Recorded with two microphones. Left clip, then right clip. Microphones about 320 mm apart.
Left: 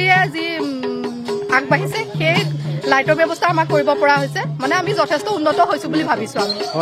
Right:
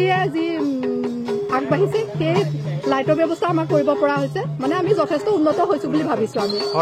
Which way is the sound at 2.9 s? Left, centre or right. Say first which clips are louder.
Left 4 dB; left.